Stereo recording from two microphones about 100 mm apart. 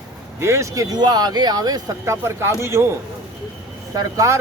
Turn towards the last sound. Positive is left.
turn(degrees=-30)  # may be behind; listen again after turning